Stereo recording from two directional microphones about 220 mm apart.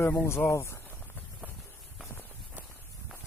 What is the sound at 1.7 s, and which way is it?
Clip-clop, 10° left (ahead or behind).